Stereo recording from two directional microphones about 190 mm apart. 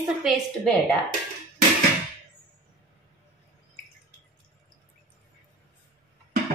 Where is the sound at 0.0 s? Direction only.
Centre (ahead or behind).